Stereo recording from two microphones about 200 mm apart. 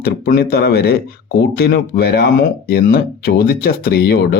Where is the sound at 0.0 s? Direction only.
50° left (ahead or behind).